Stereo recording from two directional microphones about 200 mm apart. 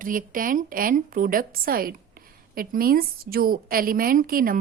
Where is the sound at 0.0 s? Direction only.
45° right (ahead or behind).